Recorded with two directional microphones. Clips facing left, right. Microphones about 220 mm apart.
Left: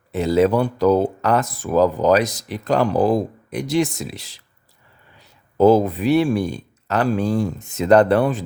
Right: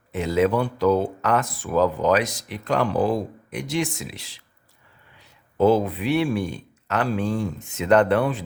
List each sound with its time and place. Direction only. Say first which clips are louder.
0.1 s speech: left 4 dB; 35° left (ahead or behind)
5.5 s speech: left 5 dB; 40° left (ahead or behind)